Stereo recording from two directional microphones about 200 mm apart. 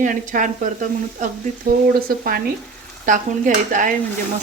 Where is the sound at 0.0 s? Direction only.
40° right (ahead or behind).